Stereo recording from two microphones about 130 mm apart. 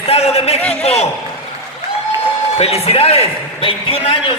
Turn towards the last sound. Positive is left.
turn(degrees=45)  # may be behind; listen again after turning